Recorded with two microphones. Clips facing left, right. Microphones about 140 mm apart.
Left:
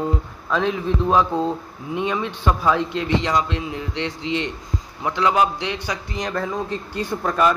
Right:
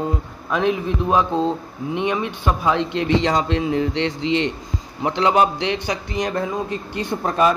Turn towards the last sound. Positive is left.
turn(degrees=-20)  # may be behind; listen again after turning